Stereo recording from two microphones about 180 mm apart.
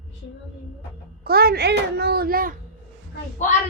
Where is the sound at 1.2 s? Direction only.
60° right (ahead or behind).